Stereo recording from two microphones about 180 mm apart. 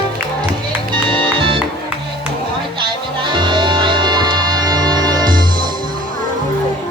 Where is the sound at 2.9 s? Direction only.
25° right (ahead or behind).